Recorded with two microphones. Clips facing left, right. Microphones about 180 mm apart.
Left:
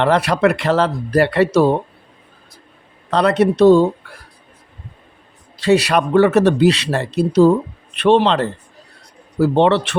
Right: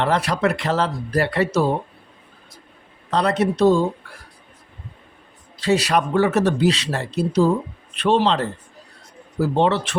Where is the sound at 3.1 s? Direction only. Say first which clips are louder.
Left 5 dB; 65° left (ahead or behind).